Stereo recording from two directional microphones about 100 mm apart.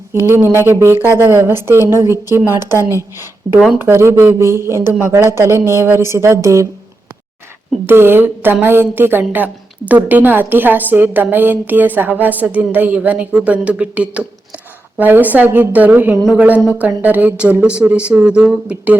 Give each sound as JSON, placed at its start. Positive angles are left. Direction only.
{"t": 0.1, "sound": "a woman's voice", "side_deg": -20}
{"t": 7.9, "sound": "a woman's voice", "side_deg": -25}